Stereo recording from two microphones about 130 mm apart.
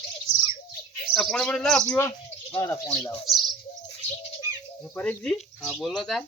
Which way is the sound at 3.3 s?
Centre (ahead or behind).